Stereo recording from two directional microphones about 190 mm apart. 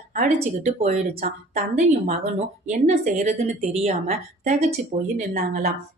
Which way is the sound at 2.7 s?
45° right (ahead or behind).